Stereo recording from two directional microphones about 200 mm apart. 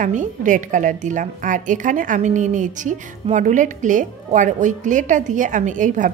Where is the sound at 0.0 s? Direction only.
40° right (ahead or behind).